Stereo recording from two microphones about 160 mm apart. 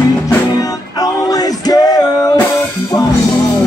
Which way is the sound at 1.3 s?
25° left (ahead or behind).